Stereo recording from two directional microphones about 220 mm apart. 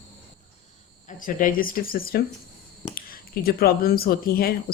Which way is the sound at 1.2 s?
40° left (ahead or behind).